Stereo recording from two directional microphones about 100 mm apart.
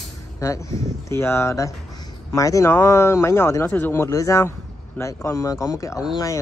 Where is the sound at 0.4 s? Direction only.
30° left (ahead or behind).